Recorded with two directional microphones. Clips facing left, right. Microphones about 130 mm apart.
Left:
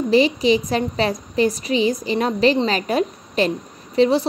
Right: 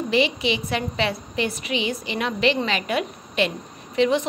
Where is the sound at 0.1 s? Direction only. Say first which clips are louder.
Left 7 dB; 40° left (ahead or behind).